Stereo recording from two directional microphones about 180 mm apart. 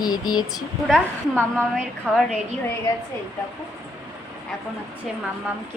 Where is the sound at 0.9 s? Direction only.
5° left (ahead or behind).